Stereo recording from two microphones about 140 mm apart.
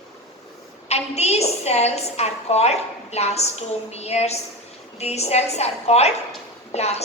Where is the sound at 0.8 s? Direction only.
50° left (ahead or behind).